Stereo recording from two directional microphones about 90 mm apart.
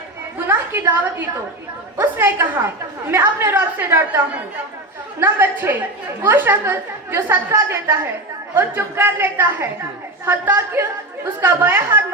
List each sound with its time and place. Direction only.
0.3 s a woman's voice: 25° right (ahead or behind)
5.2 s a woman's voice: 25° right (ahead or behind)